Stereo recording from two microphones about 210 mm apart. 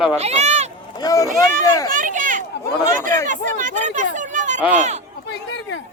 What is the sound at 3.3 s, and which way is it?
Speech, 40° right (ahead or behind).